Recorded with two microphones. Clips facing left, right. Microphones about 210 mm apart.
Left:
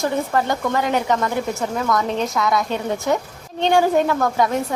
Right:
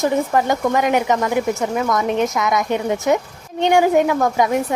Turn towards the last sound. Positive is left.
turn(degrees=-15)  # may be behind; listen again after turning